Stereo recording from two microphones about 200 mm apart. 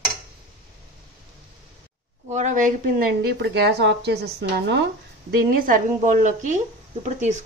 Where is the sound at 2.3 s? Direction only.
35° right (ahead or behind).